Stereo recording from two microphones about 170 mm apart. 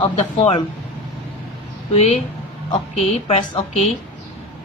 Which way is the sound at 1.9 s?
40° left (ahead or behind).